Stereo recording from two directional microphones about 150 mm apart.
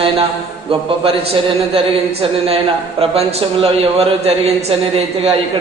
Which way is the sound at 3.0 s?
40° right (ahead or behind).